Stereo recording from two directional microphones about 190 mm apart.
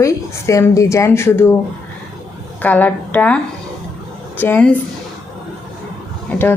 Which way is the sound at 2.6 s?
10° left (ahead or behind).